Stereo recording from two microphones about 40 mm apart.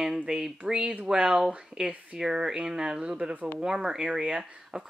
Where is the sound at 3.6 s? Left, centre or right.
Centre.